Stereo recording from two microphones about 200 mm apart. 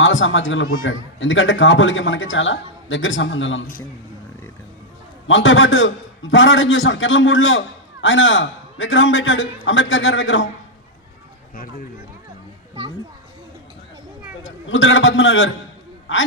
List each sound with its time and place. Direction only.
0.0 s a man's voice: 70° left (ahead or behind)
5.3 s a man's voice: 70° left (ahead or behind)
14.4 s a man's voice: 70° left (ahead or behind)